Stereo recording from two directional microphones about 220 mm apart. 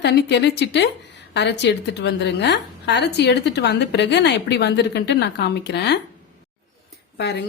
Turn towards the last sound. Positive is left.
turn(degrees=50)  # may be behind; listen again after turning